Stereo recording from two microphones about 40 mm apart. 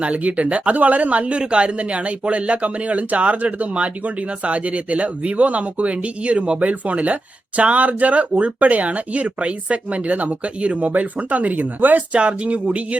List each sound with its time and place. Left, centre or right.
0.0 s speech: right
12.1 s speech: right